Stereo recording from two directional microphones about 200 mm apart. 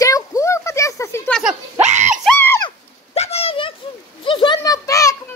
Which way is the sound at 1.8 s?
35° right (ahead or behind).